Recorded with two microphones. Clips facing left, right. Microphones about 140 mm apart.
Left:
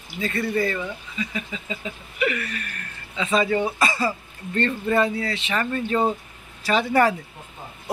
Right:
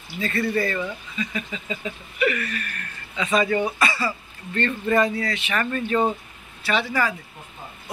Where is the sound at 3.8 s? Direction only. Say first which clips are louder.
Left 1 dB; 40° left (ahead or behind).